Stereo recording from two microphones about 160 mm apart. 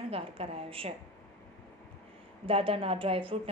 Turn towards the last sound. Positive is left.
turn(degrees=-35)  # may be behind; listen again after turning